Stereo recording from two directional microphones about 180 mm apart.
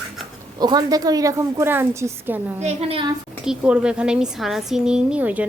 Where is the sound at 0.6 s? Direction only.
20° right (ahead or behind).